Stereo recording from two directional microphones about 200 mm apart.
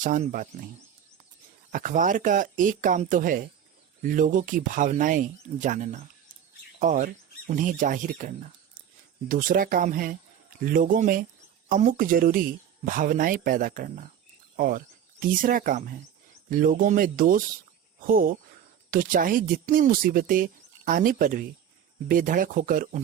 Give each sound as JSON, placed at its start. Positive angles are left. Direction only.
{"t": 0.0, "sound": "speech", "side_deg": -40}
{"t": 1.7, "sound": "speech", "side_deg": -40}
{"t": 9.3, "sound": "speech", "side_deg": -45}